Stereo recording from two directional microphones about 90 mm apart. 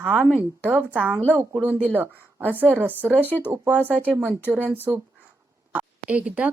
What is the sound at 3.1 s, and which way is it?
Speech, 20° left (ahead or behind).